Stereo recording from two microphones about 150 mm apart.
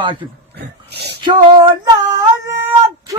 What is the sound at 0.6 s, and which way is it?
Dog, 90° right.